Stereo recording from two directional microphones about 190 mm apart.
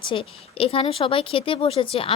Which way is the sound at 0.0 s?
25° left (ahead or behind).